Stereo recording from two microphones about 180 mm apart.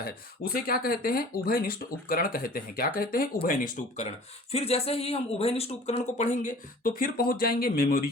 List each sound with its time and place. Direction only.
0.0 s speech: 55° left (ahead or behind)
4.5 s speech: 35° left (ahead or behind); by 8.1 s 55° left (ahead or behind)